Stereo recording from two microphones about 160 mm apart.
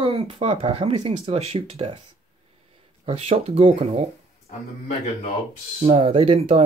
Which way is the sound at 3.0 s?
40° right (ahead or behind).